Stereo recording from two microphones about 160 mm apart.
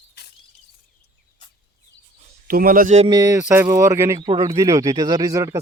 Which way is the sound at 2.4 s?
65° right (ahead or behind).